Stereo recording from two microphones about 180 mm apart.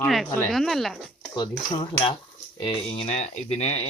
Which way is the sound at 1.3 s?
25° left (ahead or behind).